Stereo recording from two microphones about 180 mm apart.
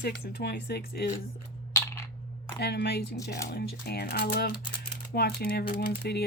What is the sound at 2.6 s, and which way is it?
Speech, 65° left (ahead or behind).